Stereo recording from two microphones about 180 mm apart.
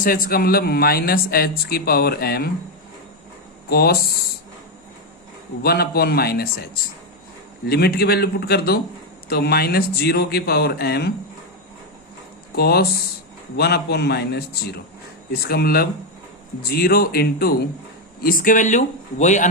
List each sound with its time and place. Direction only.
0.0 s a man's voice: 55° left (ahead or behind)
3.7 s speech: 60° left (ahead or behind)
5.6 s a man's voice: 60° left (ahead or behind)
7.7 s a man's voice: 60° left (ahead or behind)
12.5 s a man's voice: 60° left (ahead or behind); by 19.5 s 40° left (ahead or behind)